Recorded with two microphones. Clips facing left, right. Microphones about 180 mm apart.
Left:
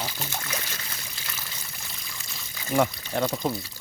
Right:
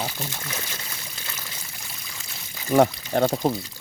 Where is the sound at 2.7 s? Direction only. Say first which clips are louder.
Right 6 dB; 45° right (ahead or behind).